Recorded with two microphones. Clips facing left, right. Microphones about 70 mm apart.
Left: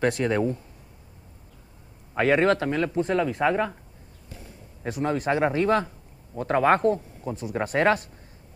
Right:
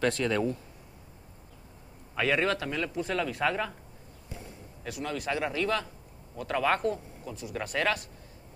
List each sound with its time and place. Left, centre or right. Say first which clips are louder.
0.0 s speech: left 4 dB; left
2.1 s speech: left 7 dB; left
4.8 s speech: left 8 dB; left